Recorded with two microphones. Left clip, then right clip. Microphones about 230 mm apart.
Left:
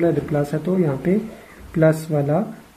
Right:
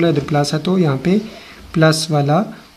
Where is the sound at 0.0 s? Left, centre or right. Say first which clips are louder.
Right 4 dB; right.